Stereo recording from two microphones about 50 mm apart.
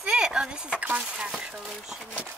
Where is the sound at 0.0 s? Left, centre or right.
Centre.